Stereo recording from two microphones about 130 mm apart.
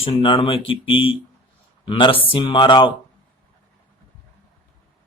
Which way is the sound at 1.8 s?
40° left (ahead or behind).